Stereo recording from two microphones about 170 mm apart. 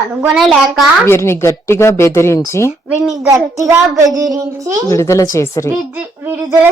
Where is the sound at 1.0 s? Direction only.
15° left (ahead or behind).